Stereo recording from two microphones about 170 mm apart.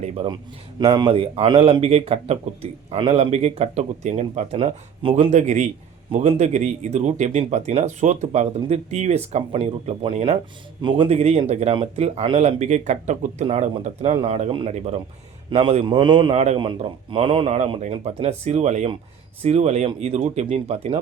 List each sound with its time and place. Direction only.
0.0 s a sound: 35° right (ahead or behind)
0.8 s a man's voice: 25° right (ahead or behind); by 15.0 s 40° right (ahead or behind)
15.4 s a man's voice: 30° right (ahead or behind)